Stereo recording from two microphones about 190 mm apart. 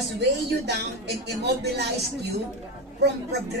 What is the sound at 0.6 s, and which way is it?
Speech, 60° right (ahead or behind).